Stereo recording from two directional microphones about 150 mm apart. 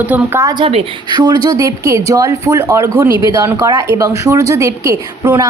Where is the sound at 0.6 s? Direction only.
35° right (ahead or behind).